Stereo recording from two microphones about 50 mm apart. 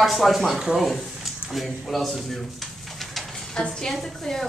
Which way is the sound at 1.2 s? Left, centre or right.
Centre.